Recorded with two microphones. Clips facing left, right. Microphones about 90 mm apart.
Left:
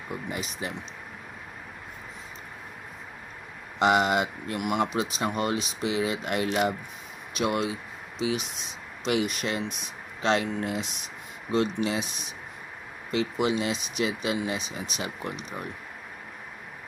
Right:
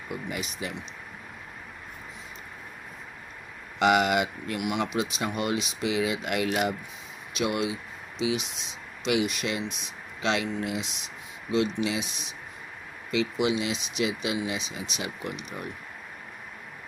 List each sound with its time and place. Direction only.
0.1 s speech: 30° left (ahead or behind)
3.8 s speech: 30° left (ahead or behind)